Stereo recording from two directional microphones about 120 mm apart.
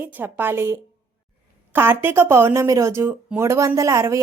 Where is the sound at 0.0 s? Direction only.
15° right (ahead or behind).